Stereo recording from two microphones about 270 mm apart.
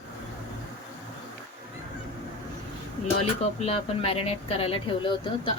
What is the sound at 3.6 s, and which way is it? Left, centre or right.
Speech, left.